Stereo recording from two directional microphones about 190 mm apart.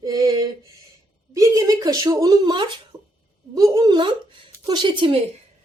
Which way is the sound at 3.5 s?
15° right (ahead or behind).